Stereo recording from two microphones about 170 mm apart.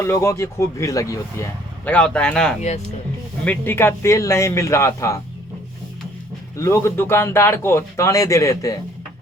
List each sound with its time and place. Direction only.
0.0 s speech: 15° left (ahead or behind)
1.8 s speech: 5° left (ahead or behind)
6.6 s speech: 15° left (ahead or behind)